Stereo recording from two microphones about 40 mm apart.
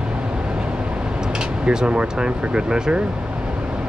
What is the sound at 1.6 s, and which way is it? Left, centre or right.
Speech, right.